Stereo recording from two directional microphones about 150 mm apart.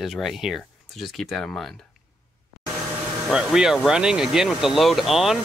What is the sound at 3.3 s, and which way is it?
Speech, 5° right (ahead or behind).